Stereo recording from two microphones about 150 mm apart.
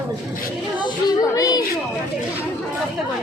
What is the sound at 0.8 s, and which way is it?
Speech, 25° left (ahead or behind).